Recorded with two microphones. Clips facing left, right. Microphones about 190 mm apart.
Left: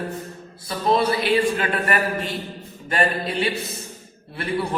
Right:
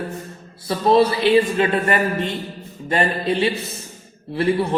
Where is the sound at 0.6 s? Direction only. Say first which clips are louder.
Right 5 dB; 25° right (ahead or behind).